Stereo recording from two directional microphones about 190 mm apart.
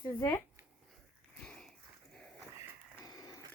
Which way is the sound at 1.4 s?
5° left (ahead or behind).